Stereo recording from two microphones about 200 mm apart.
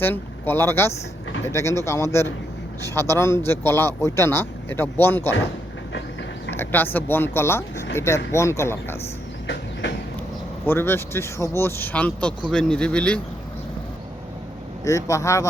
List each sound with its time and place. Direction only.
0.0 s a man's voice: 10° left (ahead or behind)
6.6 s a man's voice: 10° left (ahead or behind)
10.7 s a man's voice: 10° left (ahead or behind)
14.8 s a man's voice: 15° left (ahead or behind)